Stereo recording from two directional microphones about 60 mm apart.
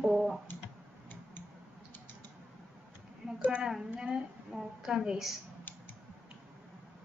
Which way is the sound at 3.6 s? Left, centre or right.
Centre.